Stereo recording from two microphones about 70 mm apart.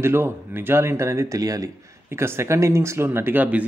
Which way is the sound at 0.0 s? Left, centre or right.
Right.